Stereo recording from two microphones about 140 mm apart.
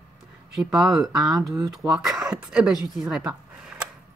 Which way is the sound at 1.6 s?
30° right (ahead or behind).